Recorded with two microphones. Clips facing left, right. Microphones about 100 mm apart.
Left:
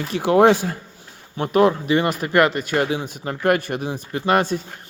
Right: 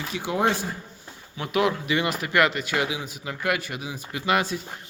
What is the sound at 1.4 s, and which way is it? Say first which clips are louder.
Speech: left 7 dB; 40° left (ahead or behind).